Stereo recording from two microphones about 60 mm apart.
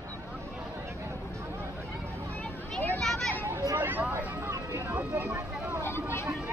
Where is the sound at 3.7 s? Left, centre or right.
Right.